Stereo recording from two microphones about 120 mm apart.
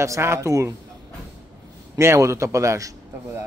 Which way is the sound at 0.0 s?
25° right (ahead or behind).